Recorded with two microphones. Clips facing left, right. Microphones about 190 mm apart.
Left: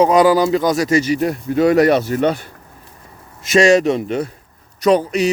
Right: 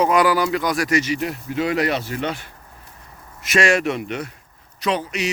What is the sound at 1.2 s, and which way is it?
Speech, 45° left (ahead or behind).